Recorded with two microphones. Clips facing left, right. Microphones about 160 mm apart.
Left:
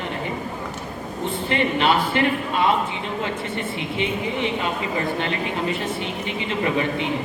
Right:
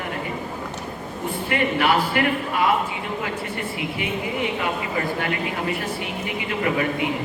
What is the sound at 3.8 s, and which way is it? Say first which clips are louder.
Speech: left 2 dB; 25° left (ahead or behind).